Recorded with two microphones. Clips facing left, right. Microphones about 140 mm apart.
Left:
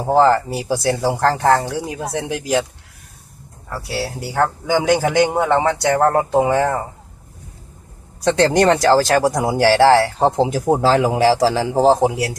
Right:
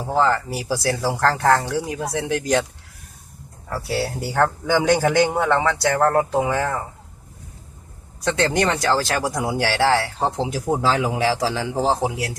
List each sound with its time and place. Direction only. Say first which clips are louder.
0.0 s speech: left 6 dB; 40° left (ahead or behind)
0.5 s a man's voice: left 4 dB; 25° left (ahead or behind)
2.4 s speech: left 2 dB; 5° left (ahead or behind)
3.7 s speech: right 1 dB; centre (ahead or behind)
4.4 s a man's voice: left 2 dB; 15° left (ahead or behind); by 6.8 s 30° left (ahead or behind)
8.2 s speech: left 6 dB; 35° left (ahead or behind)